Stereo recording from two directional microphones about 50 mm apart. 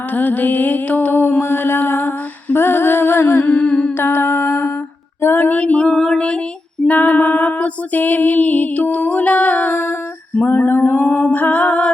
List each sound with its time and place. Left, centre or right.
0.1 s music: left
1.4 s lullaby: left
3.4 s humming: centre
3.9 s lullaby: left
5.5 s music: left
6.8 s music: left
10.3 s a sound: left
11.0 s humming: left